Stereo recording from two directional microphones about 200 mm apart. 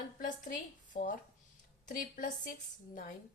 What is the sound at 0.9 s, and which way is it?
A woman's voice, 40° left (ahead or behind).